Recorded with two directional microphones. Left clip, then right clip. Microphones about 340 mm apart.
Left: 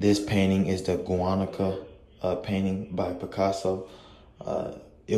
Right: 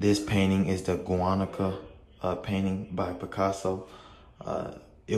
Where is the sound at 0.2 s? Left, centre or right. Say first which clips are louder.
Left 2 dB; centre.